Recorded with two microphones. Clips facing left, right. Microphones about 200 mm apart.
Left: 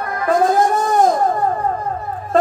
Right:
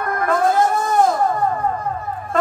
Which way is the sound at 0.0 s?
55° right (ahead or behind).